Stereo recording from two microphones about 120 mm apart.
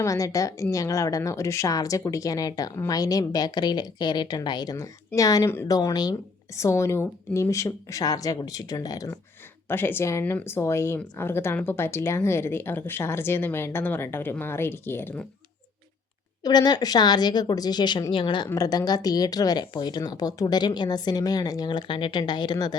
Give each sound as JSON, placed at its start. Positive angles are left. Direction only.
{"t": 0.0, "sound": "a woman's voice", "side_deg": 25}
{"t": 9.6, "sound": "a woman's voice", "side_deg": 15}
{"t": 16.4, "sound": "speech", "side_deg": 35}
{"t": 18.4, "sound": "speech", "side_deg": 30}